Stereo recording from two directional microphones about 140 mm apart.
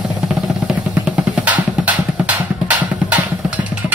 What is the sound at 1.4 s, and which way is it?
Music, 10° right (ahead or behind).